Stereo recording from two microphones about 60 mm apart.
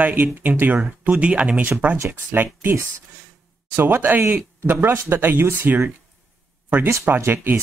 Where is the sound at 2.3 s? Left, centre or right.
Right.